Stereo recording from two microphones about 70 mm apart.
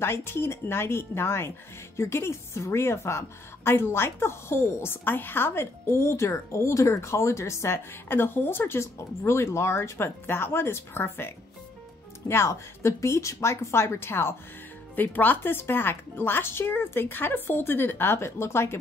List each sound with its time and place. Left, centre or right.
0.0 s speech: left
15.0 s speech: left